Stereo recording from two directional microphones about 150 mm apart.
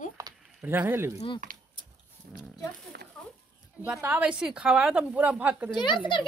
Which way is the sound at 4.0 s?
10° right (ahead or behind).